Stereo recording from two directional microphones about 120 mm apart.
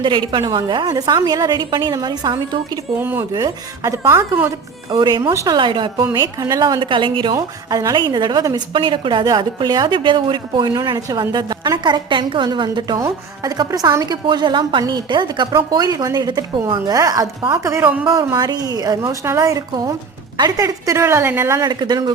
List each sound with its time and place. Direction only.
0.0 s a woman's voice: 40° right (ahead or behind)
3.0 s a woman's voice: 20° right (ahead or behind)
4.9 s a woman's voice: 35° right (ahead or behind)
5.2 s a woman's voice: 25° right (ahead or behind)
5.5 s a woman's voice: 40° right (ahead or behind)
6.1 s a woman's voice: 30° right (ahead or behind)
7.3 s a woman's voice: 30° right (ahead or behind)
21.7 s a woman's voice: 35° right (ahead or behind)